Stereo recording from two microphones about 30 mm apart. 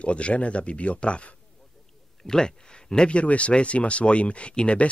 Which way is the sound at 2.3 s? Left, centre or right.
Left.